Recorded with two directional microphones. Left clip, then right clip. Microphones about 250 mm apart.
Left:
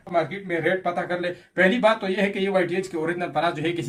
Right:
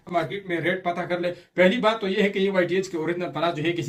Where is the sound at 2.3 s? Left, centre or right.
Centre.